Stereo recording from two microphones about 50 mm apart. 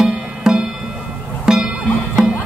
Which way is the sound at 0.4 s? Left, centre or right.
Centre.